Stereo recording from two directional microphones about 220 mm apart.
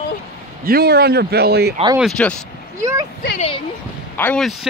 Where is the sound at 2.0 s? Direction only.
5° left (ahead or behind).